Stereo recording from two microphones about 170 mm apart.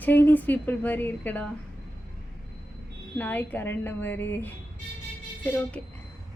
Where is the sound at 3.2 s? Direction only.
10° left (ahead or behind).